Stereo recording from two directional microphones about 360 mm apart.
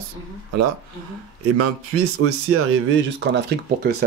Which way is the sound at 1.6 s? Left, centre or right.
Right.